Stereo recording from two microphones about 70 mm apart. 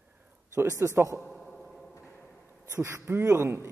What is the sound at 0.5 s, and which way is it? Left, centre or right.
Speech, right.